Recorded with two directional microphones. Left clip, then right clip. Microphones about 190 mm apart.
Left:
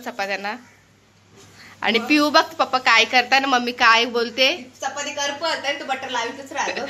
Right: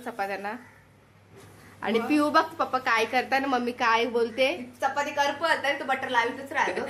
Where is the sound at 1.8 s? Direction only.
15° left (ahead or behind).